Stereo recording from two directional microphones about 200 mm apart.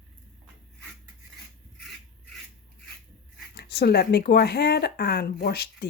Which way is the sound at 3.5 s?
55° left (ahead or behind).